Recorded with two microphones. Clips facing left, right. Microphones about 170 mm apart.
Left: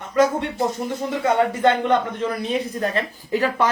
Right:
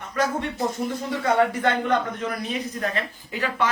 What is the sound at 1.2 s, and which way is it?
A man's voice, 25° left (ahead or behind).